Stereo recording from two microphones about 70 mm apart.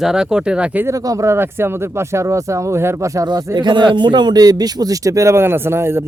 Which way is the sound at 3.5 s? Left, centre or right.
Right.